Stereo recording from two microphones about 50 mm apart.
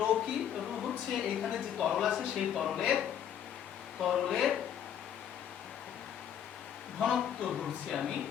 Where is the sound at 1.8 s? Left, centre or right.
Centre.